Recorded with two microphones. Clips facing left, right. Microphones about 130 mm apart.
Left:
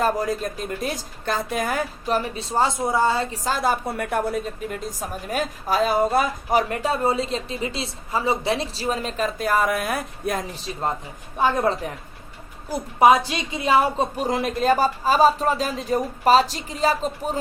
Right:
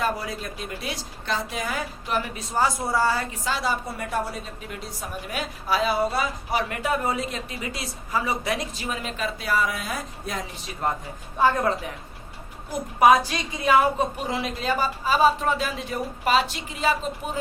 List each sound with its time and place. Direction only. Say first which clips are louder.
0.0 s a woman's voice: left 5 dB; 45° left (ahead or behind)
2.0 s a woman's voice: left 4 dB; 35° left (ahead or behind)
3.3 s a woman's voice: left 4 dB; 45° left (ahead or behind)
10.5 s a woman's voice: left 1 dB; 25° left (ahead or behind)
12.7 s a woman's voice: left 1 dB; 25° left (ahead or behind)
14.3 s speech: left 6 dB; 45° left (ahead or behind)